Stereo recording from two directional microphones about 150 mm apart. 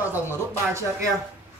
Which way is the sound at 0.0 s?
15° right (ahead or behind).